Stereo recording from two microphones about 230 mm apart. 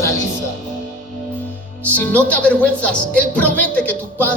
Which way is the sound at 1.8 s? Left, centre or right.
Centre.